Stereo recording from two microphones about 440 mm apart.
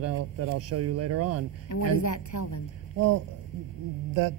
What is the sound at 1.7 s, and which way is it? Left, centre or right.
Speech, left.